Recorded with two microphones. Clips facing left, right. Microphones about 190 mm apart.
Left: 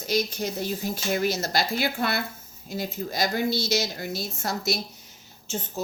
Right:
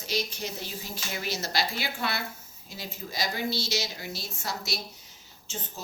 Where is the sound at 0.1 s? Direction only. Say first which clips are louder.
Left 6 dB; 45° left (ahead or behind).